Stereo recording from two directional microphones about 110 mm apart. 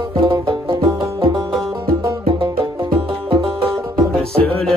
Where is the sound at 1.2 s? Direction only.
50° right (ahead or behind).